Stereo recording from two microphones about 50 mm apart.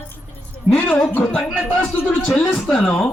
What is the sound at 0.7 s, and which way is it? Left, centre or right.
Speech, right.